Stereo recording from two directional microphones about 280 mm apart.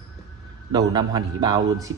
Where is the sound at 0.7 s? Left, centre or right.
Centre.